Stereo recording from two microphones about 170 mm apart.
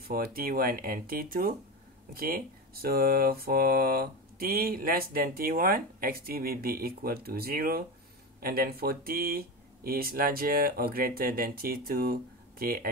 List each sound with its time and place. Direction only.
0.1 s speech: 60° right (ahead or behind)